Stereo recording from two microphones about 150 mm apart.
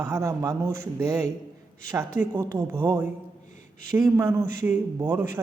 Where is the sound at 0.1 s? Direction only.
20° right (ahead or behind).